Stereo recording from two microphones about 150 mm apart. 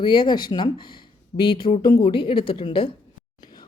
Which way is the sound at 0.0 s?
30° left (ahead or behind).